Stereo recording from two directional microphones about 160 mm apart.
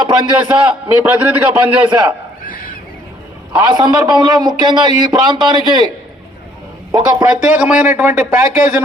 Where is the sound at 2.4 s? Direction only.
60° left (ahead or behind).